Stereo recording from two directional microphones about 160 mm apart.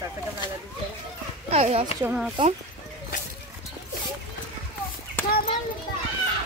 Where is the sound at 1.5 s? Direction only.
40° right (ahead or behind).